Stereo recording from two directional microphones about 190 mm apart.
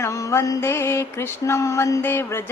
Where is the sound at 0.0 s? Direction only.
15° left (ahead or behind).